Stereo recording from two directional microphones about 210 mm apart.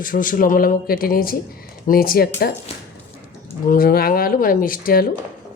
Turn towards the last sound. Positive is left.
turn(degrees=40)  # may be behind; listen again after turning